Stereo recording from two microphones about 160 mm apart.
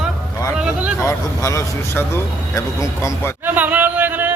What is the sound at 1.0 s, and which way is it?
Speech, 20° left (ahead or behind).